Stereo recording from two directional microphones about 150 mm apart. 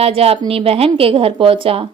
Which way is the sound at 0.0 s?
40° right (ahead or behind).